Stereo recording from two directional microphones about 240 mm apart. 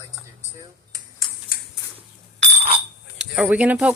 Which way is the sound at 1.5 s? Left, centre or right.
Left.